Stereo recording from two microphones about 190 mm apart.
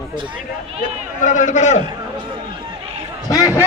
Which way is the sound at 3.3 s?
15° left (ahead or behind).